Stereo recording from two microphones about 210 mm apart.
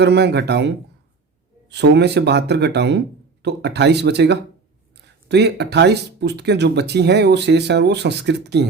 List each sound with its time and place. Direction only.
0.0 s speech: 50° right (ahead or behind)
1.7 s speech: 55° right (ahead or behind)